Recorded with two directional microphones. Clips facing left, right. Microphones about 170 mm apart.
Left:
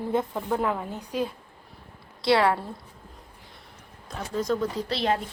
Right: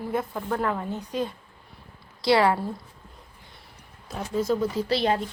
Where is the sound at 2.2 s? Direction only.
Centre (ahead or behind).